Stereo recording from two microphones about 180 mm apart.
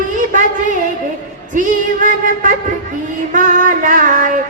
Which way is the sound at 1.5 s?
45° right (ahead or behind).